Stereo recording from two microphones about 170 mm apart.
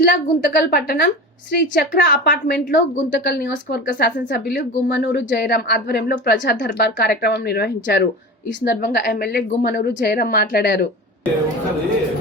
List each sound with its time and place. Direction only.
0.0 s a woman's voice: 65° left (ahead or behind)